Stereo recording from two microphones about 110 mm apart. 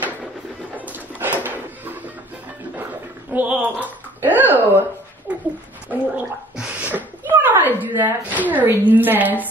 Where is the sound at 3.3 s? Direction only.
15° right (ahead or behind).